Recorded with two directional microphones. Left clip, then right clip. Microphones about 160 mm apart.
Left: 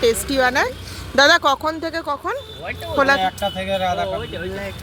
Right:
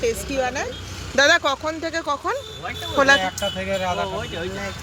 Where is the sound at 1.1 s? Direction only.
20° left (ahead or behind).